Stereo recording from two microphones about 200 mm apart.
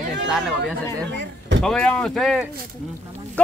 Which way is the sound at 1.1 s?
60° right (ahead or behind).